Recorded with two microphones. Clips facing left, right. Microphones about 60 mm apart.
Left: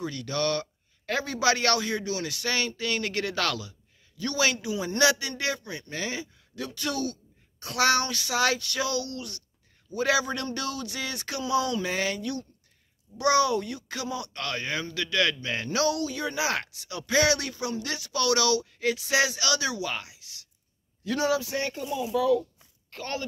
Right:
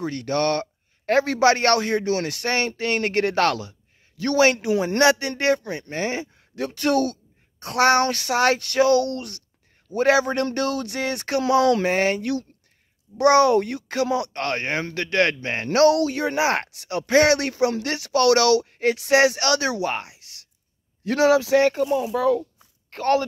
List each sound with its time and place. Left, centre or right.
0.0 s a man's voice: right
11.9 s a man's voice: right
14.3 s a man's voice: right
21.0 s a man's voice: right
21.8 s speech: right